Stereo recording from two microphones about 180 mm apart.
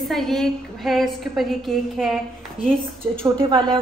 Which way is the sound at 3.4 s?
25° right (ahead or behind).